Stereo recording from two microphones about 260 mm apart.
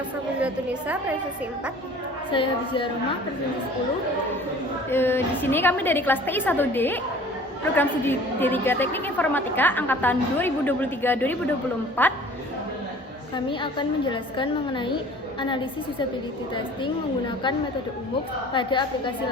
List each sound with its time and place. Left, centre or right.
0.3 s a woman's voice: centre
2.3 s a woman's voice: centre
4.9 s a woman's voice: centre
13.3 s a woman's voice: centre
18.5 s a woman's voice: centre